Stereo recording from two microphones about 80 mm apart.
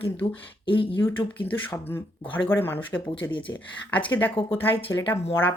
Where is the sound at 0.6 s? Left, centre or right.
Left.